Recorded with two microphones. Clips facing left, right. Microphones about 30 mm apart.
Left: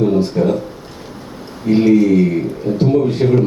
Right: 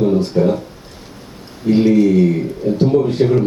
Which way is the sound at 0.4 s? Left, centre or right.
Centre.